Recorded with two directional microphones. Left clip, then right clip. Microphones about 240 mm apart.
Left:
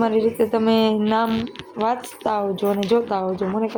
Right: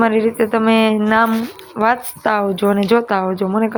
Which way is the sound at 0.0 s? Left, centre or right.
Centre.